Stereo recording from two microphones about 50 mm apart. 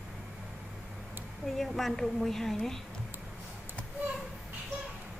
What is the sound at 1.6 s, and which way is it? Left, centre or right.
A woman's voice, centre.